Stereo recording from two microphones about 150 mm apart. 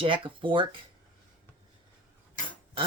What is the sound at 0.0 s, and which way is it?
Speech, 35° right (ahead or behind).